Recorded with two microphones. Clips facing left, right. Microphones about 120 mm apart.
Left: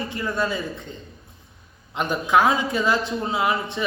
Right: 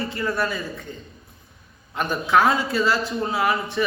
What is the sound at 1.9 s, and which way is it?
A man's voice, 15° left (ahead or behind).